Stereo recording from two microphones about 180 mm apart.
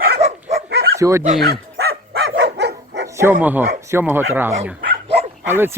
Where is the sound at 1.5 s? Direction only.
60° right (ahead or behind).